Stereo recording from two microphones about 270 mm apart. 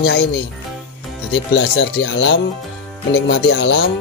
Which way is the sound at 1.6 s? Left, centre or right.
Left.